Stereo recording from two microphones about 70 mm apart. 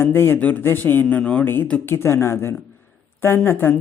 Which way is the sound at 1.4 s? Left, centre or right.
Left.